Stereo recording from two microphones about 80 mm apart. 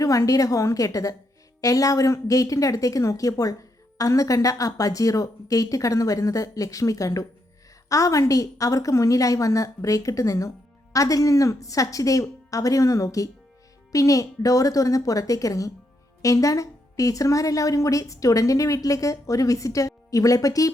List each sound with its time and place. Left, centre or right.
0.0 s a woman's voice: left